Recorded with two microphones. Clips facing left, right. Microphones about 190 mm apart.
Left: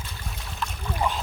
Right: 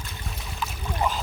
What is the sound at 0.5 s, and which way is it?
Boat, 5° right (ahead or behind).